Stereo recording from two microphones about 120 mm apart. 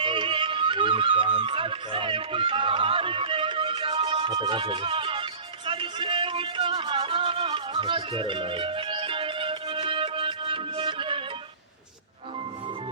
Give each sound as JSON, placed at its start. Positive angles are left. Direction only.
{"t": 0.0, "sound": "music", "side_deg": -45}